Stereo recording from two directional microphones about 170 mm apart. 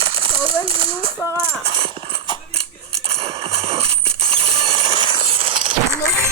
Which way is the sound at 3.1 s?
35° right (ahead or behind).